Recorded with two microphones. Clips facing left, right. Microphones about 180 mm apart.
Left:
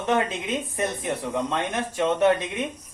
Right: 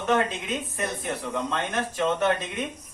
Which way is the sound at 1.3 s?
15° left (ahead or behind).